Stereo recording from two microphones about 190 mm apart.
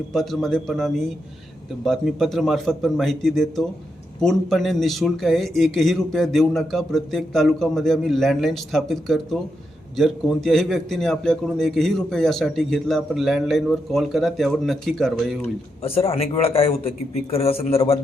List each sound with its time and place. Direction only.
0.1 s a man's voice: centre (ahead or behind)
15.8 s speech: 30° left (ahead or behind)